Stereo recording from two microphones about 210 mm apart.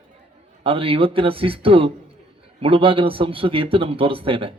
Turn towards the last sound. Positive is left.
turn(degrees=-25)  # may be behind; listen again after turning